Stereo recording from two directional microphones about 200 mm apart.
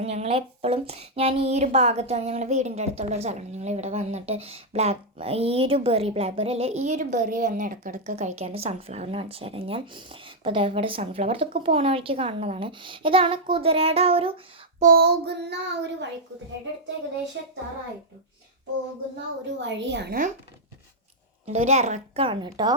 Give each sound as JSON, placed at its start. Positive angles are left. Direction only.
{"t": 0.0, "sound": "a child's voice", "side_deg": -30}
{"t": 14.8, "sound": "child singing", "side_deg": -45}
{"t": 19.5, "sound": "child singing", "side_deg": -60}
{"t": 21.4, "sound": "speech", "side_deg": -35}